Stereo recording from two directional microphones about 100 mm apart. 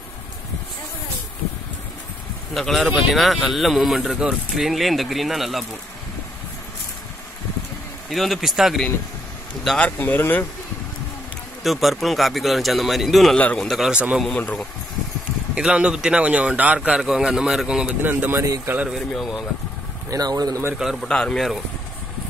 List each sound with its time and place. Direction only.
2.5 s speech: centre (ahead or behind)
8.1 s speech: centre (ahead or behind)
9.7 s speech: 15° left (ahead or behind)
11.6 s speech: centre (ahead or behind)
13.4 s speech: 15° left (ahead or behind)
13.7 s a man's voice: 5° right (ahead or behind)
15.5 s a man's voice: 10° right (ahead or behind)
18.0 s speech: 20° right (ahead or behind)
19.1 s speech: 5° right (ahead or behind)
20.1 s speech: 40° right (ahead or behind)
20.8 s speech: centre (ahead or behind)